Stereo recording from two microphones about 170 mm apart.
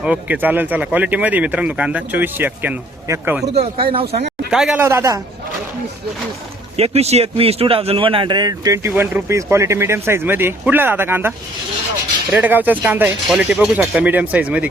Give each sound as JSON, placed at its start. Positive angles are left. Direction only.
{"t": 0.0, "sound": "a man's voice", "side_deg": -10}
{"t": 3.4, "sound": "speech", "side_deg": -35}
{"t": 4.4, "sound": "speech", "side_deg": -5}
{"t": 4.8, "sound": "a man's voice", "side_deg": -15}
{"t": 6.7, "sound": "a man's voice", "side_deg": -40}